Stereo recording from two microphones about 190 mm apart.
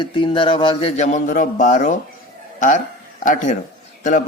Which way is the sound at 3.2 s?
40° left (ahead or behind).